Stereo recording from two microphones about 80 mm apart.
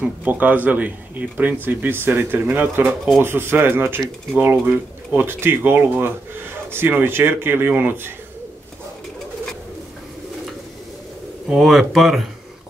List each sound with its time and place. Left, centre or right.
0.0 s speech: centre
11.4 s speech: centre